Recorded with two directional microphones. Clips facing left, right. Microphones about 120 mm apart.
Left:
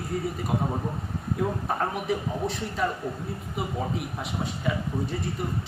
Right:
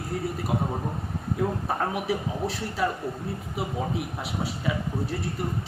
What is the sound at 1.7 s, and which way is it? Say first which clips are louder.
A man's voice: even; 5° right (ahead or behind).